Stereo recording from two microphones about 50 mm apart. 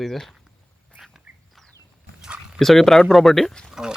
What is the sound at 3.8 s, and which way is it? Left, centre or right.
Speech, centre.